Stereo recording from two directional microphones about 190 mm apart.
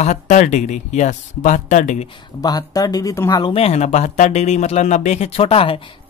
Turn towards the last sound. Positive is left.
turn(degrees=30)  # may be behind; listen again after turning